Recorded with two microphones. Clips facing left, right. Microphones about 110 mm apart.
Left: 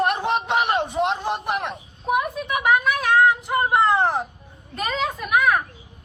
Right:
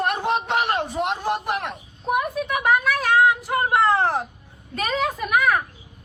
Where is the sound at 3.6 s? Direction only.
15° left (ahead or behind).